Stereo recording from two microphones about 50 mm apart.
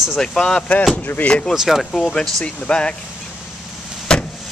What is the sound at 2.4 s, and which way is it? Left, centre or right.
Speech, left.